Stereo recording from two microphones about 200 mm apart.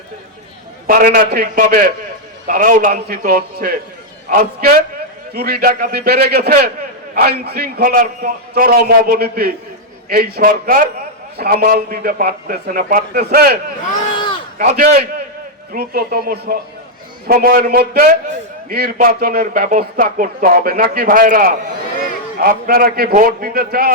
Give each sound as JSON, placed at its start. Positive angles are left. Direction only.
{"t": 0.9, "sound": "speech", "side_deg": -45}
{"t": 14.6, "sound": "speech", "side_deg": -45}